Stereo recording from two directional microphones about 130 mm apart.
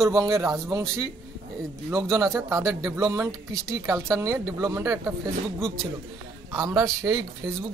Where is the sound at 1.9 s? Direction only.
20° right (ahead or behind).